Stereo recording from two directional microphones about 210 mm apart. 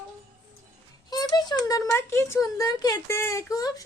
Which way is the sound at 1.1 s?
20° left (ahead or behind).